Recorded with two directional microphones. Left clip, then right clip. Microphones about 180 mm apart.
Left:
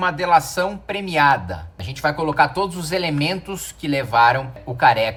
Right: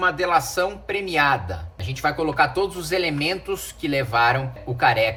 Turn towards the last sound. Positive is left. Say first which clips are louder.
# left 3 dB
turn(degrees=10)  # may be behind; listen again after turning